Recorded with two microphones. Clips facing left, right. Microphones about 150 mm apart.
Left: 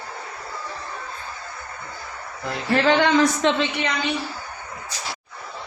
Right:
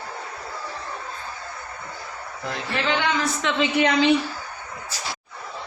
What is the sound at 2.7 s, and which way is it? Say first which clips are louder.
Speech: left 7 dB; 45° left (ahead or behind).